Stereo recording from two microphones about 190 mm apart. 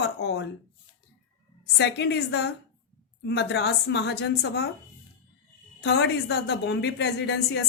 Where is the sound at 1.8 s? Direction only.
65° left (ahead or behind).